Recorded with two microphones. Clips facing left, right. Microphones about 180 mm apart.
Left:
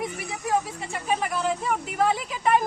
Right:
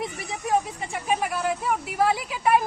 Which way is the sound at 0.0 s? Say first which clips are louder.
Even; 20° right (ahead or behind).